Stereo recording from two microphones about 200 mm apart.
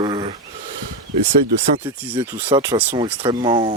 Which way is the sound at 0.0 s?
25° right (ahead or behind).